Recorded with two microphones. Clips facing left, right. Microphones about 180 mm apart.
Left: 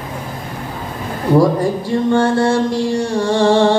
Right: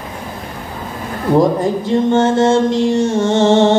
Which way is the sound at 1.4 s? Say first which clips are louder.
Right 1 dB; 20° right (ahead or behind).